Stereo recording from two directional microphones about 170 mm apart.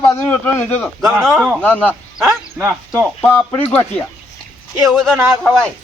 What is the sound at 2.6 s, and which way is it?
Speech, 15° right (ahead or behind).